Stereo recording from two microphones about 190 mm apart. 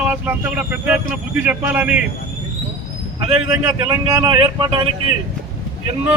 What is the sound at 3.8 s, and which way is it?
Speech, 20° right (ahead or behind).